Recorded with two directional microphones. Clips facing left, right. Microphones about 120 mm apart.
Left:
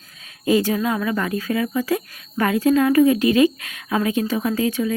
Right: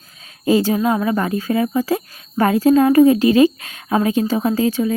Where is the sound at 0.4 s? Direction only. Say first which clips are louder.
Right 3 dB; 30° right (ahead or behind).